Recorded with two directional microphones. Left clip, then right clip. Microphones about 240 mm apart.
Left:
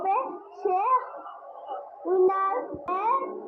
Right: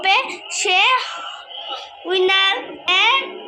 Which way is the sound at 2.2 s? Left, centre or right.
Centre.